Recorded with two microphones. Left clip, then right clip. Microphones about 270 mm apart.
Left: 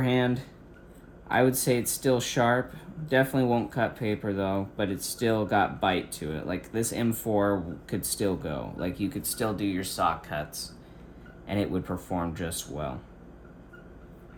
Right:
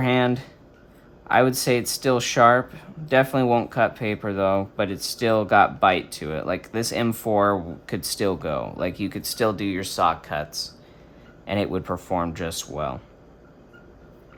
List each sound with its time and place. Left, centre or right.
0.0 s speech: right